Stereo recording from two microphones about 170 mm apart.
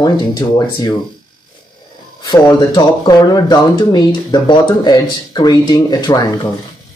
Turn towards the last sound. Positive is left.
turn(degrees=25)  # may be behind; listen again after turning